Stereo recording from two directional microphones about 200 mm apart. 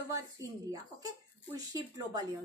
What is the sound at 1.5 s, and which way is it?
Speech, 20° right (ahead or behind).